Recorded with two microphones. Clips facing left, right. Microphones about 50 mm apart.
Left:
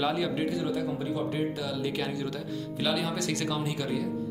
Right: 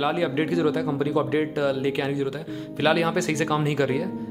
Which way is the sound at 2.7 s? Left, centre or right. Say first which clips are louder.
Right 9 dB; right.